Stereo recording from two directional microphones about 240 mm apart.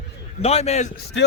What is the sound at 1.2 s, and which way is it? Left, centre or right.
Speech, left.